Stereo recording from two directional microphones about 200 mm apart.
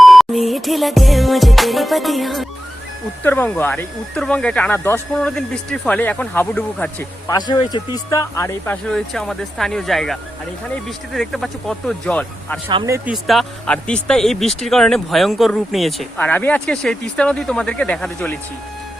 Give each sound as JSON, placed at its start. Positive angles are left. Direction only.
{"t": 0.0, "sound": "speech", "side_deg": 0}
{"t": 7.3, "sound": "speech", "side_deg": 20}
{"t": 12.6, "sound": "speech", "side_deg": -20}
{"t": 13.1, "sound": "speech", "side_deg": 0}